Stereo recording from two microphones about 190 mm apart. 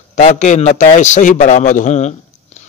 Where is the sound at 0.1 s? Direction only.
35° left (ahead or behind).